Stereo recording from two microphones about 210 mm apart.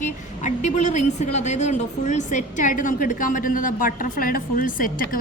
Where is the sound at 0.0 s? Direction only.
35° left (ahead or behind).